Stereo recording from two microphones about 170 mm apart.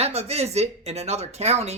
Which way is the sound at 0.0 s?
40° right (ahead or behind).